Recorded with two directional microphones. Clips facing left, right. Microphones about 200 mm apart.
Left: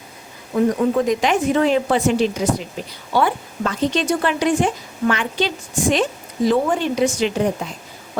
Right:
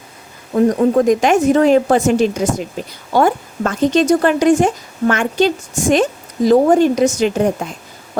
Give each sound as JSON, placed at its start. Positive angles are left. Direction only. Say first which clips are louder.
{"t": 0.5, "sound": "speech", "louder": "right 5 dB", "side_deg": -45}